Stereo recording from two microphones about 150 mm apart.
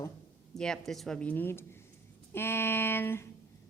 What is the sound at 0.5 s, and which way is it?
Speech, 5° left (ahead or behind).